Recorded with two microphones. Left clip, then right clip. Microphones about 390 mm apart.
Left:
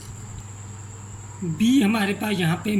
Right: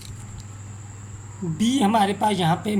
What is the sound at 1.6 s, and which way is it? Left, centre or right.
A man's voice, centre.